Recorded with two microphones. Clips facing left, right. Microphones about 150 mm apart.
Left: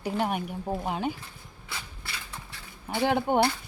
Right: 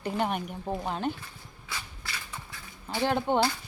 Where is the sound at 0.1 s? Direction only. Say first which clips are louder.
Left 1 dB; 5° left (ahead or behind).